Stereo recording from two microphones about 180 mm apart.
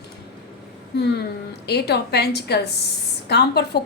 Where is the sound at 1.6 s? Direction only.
65° left (ahead or behind).